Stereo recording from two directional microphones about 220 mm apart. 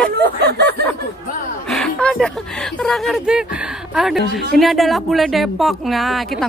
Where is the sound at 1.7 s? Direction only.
Centre (ahead or behind).